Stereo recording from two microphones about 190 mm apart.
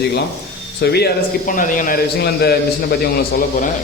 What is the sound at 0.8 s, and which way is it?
A man's voice, 60° left (ahead or behind).